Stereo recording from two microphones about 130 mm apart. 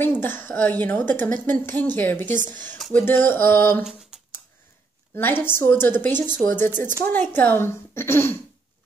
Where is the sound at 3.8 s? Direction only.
5° right (ahead or behind).